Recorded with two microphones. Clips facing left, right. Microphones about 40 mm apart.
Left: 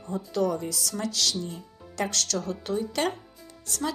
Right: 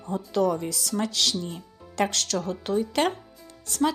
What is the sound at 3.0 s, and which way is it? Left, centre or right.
Speech, right.